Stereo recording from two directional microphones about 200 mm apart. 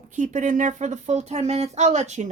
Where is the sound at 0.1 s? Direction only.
40° right (ahead or behind).